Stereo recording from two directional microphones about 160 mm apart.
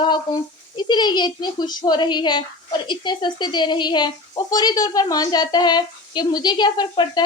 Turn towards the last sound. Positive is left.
turn(degrees=30)  # may be behind; listen again after turning